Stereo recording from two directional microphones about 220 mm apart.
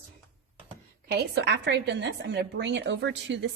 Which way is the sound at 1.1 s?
45° right (ahead or behind).